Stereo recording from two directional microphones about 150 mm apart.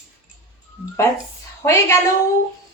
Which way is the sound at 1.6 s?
15° left (ahead or behind).